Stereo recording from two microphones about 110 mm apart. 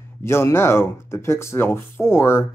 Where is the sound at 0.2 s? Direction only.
25° left (ahead or behind).